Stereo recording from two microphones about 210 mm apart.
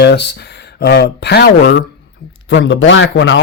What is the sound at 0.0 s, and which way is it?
Speech, 55° left (ahead or behind).